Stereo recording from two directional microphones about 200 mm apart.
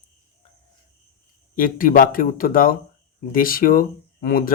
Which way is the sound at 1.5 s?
45° left (ahead or behind).